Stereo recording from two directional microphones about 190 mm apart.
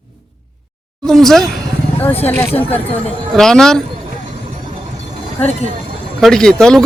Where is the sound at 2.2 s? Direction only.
15° left (ahead or behind).